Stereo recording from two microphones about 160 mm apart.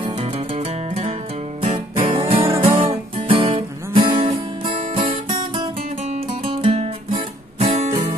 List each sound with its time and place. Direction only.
0.0 s music: 35° right (ahead or behind)